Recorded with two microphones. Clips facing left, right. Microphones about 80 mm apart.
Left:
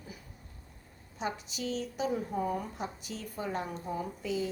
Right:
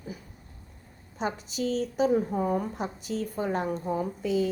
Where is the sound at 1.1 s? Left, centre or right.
Right.